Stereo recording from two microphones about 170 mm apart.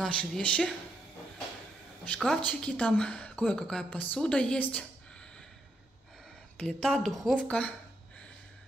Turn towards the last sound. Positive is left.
turn(degrees=5)  # may be behind; listen again after turning